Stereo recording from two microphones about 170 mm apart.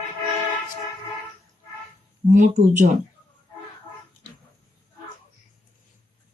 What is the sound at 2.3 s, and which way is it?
Speech, 45° right (ahead or behind).